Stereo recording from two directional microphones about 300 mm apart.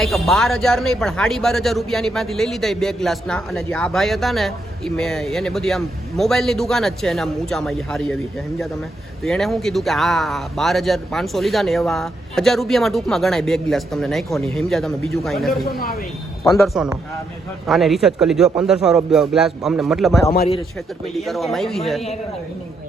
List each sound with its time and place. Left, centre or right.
0.0 s a man's voice: centre
15.6 s speech: left
16.4 s a man's voice: centre
16.7 s a man's voice: centre
21.2 s a man's voice: centre